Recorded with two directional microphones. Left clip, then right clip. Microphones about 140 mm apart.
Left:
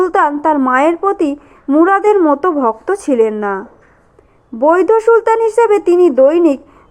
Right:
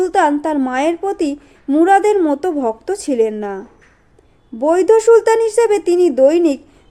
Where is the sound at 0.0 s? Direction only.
20° right (ahead or behind).